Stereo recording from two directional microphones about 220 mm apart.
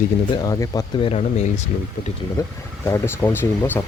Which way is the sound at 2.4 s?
15° left (ahead or behind).